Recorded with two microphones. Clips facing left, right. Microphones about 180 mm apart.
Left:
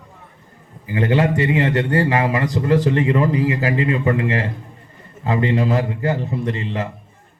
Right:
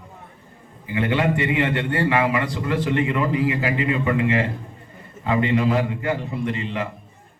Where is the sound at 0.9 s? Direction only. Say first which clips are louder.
Left 3 dB; 40° left (ahead or behind).